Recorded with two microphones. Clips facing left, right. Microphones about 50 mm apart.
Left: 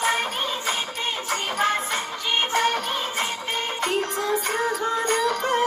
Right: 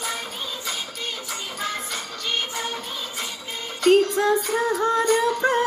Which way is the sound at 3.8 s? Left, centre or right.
Left.